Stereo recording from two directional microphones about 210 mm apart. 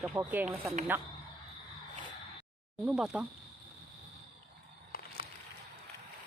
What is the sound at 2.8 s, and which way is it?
Speech, centre (ahead or behind).